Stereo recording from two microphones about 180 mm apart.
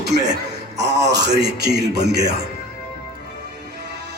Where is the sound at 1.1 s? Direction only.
70° right (ahead or behind).